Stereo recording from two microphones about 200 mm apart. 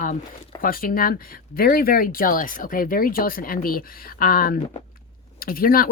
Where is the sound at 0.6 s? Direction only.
45° left (ahead or behind).